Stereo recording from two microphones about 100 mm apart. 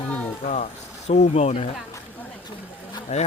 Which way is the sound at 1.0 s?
90° left.